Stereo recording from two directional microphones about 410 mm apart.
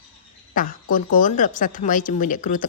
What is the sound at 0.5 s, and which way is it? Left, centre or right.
Speech, centre.